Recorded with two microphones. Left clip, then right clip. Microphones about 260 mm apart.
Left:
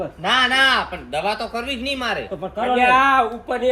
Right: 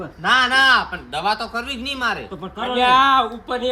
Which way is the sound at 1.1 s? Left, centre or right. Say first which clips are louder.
Right 1 dB; right.